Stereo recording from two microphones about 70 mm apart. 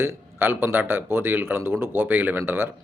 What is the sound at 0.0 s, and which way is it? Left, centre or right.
A man's voice, right.